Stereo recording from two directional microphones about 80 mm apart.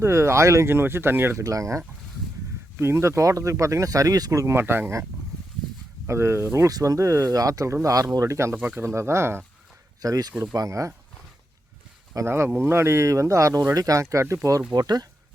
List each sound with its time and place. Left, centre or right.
0.0 s speech: right
0.7 s speech: right
1.5 s speech: right
2.7 s speech: right
4.5 s speech: right
6.1 s speech: right
6.7 s speech: right
8.5 s speech: right
10.0 s speech: right
12.2 s speech: right
14.7 s speech: right